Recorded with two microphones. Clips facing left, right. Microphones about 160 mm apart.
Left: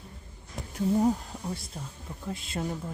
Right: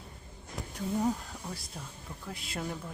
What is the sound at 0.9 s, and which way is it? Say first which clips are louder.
Speech: left 4 dB; 20° left (ahead or behind).